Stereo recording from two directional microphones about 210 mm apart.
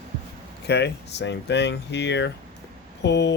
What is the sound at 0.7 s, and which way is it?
Speech, 55° left (ahead or behind).